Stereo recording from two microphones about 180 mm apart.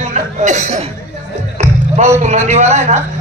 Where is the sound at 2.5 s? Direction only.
40° right (ahead or behind).